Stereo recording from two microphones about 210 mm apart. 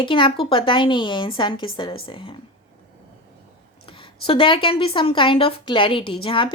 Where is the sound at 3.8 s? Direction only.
25° left (ahead or behind).